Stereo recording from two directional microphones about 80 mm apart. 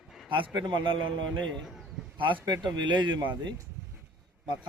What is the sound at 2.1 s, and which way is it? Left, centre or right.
Speech, right.